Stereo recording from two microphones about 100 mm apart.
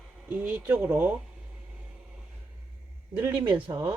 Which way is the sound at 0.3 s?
15° right (ahead or behind).